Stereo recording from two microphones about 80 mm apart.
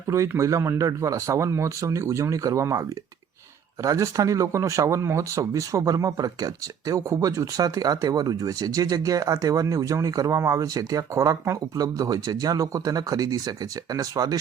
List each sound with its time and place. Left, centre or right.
0.1 s speech: right
3.8 s speech: right